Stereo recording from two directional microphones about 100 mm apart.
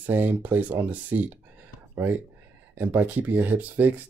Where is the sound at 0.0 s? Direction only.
20° right (ahead or behind).